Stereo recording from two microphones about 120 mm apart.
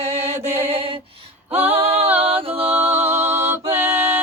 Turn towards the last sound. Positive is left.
turn(degrees=-20)  # may be behind; listen again after turning